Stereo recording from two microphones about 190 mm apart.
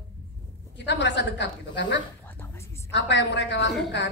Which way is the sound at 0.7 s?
65° left (ahead or behind).